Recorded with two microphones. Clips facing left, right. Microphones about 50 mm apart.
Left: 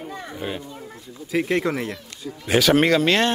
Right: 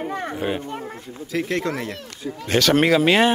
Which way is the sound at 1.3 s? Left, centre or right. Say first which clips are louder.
Left 2 dB; centre.